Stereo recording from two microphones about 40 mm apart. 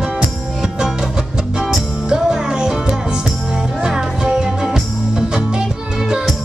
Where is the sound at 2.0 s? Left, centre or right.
Centre.